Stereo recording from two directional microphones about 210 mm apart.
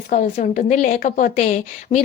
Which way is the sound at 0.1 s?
35° left (ahead or behind).